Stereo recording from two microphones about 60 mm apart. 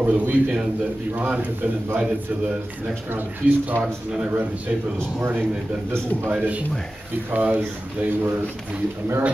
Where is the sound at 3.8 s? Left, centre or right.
Centre.